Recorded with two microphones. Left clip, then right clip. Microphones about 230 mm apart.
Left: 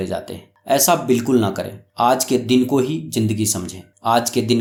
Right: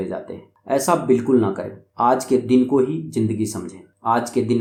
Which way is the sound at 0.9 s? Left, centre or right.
Left.